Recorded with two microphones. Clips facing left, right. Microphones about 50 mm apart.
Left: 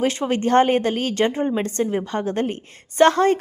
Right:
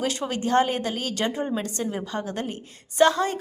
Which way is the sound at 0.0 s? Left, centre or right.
Left.